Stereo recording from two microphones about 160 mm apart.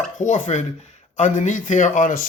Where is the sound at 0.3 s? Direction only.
45° left (ahead or behind).